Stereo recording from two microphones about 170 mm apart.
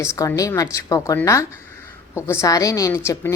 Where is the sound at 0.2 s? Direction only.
20° left (ahead or behind).